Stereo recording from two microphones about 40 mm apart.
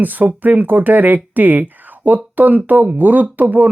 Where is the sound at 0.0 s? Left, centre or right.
Right.